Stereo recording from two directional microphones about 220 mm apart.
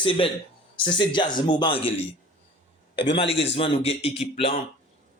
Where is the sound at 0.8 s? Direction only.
20° left (ahead or behind).